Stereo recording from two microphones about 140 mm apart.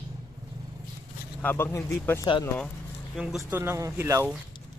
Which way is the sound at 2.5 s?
Centre (ahead or behind).